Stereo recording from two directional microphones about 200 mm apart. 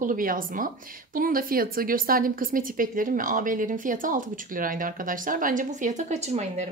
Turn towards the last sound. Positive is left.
turn(degrees=-35)  # may be behind; listen again after turning